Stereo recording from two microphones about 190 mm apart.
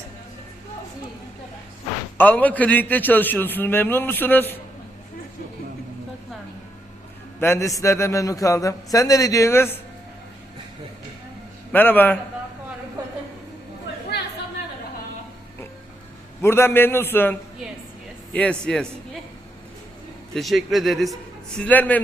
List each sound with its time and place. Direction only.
2.1 s a man's voice: 10° left (ahead or behind)
7.3 s a man's voice: 15° left (ahead or behind)
11.7 s a man's voice: 10° left (ahead or behind)
14.1 s a sound: 65° left (ahead or behind)
16.4 s a man's voice: 15° left (ahead or behind)
18.3 s a man's voice: 5° left (ahead or behind)
20.3 s a man's voice: centre (ahead or behind)